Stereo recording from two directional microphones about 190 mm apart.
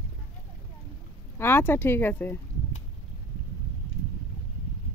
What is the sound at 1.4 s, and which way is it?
Speech, 10° left (ahead or behind).